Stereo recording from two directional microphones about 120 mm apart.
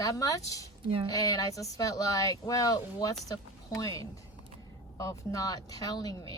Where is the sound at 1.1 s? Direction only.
30° left (ahead or behind).